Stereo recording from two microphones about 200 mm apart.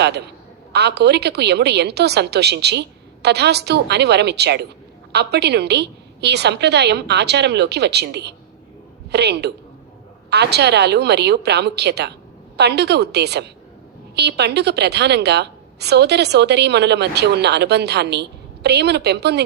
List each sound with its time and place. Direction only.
0.7 s a woman's voice: 55° right (ahead or behind)